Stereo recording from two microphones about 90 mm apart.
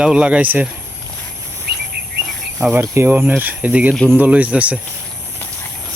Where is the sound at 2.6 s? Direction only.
25° right (ahead or behind).